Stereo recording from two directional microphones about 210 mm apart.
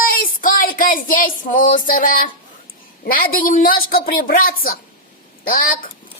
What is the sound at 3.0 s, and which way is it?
A woman's voice, 45° left (ahead or behind).